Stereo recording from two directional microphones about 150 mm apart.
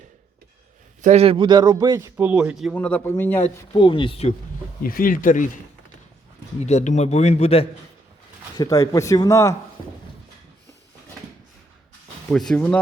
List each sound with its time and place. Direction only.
1.0 s a man's voice: 45° right (ahead or behind); by 2.7 s 5° right (ahead or behind)
2.7 s speech: 10° left (ahead or behind)
3.8 s speech: 35° left (ahead or behind)
4.8 s speech: 70° left (ahead or behind)
6.6 s a man's voice: 50° left (ahead or behind)
8.5 s speech: 20° left (ahead or behind)
12.3 s speech: 5° left (ahead or behind)